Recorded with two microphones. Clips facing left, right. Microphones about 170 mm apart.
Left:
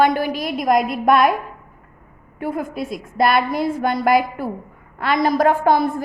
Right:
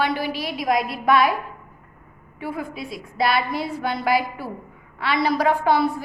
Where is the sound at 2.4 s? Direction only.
50° left (ahead or behind).